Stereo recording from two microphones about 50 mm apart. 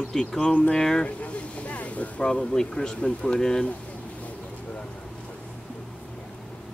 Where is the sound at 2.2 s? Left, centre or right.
Centre.